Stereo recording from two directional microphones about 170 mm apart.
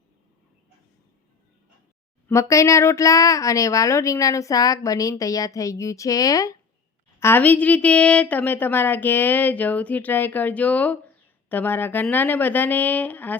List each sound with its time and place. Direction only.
2.2 s a woman's voice: 15° left (ahead or behind)